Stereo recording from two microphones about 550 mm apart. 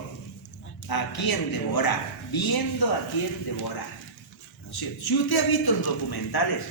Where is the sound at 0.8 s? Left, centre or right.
Left.